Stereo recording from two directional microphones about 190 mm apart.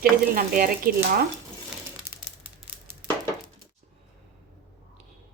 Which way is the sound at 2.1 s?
15° right (ahead or behind).